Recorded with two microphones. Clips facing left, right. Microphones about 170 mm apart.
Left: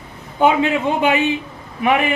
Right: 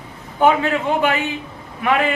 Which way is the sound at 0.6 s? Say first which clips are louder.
Left 1 dB; 20° left (ahead or behind).